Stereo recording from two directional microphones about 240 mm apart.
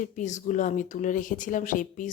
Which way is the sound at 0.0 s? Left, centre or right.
Left.